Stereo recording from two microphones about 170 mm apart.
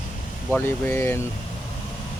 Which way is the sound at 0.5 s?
15° left (ahead or behind).